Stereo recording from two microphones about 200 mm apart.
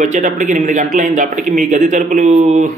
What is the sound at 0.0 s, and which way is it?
Speech, 40° right (ahead or behind).